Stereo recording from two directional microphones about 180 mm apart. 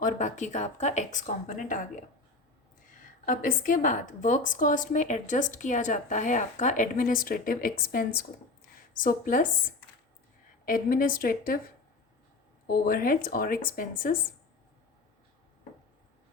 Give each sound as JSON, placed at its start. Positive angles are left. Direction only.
{"t": 0.0, "sound": "a woman's voice", "side_deg": 45}
{"t": 3.2, "sound": "a woman's voice", "side_deg": 45}
{"t": 10.7, "sound": "a woman's voice", "side_deg": 50}
{"t": 12.6, "sound": "a woman's voice", "side_deg": 55}